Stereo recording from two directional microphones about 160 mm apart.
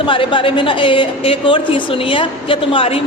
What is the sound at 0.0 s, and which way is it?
A woman's voice, 30° left (ahead or behind).